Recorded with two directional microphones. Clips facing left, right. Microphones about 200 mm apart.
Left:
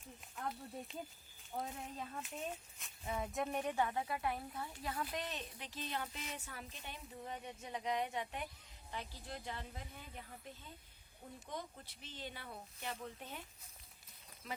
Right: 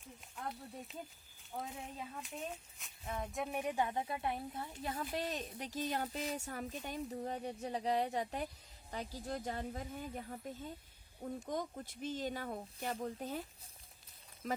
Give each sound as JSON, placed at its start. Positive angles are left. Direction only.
{"t": 0.2, "sound": "speech", "side_deg": 0}
{"t": 5.3, "sound": "speech", "side_deg": -45}
{"t": 14.4, "sound": "speech", "side_deg": -45}